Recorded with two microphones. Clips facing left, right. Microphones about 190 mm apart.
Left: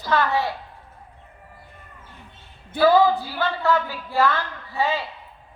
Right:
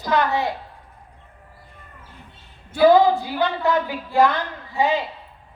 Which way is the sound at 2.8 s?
15° right (ahead or behind).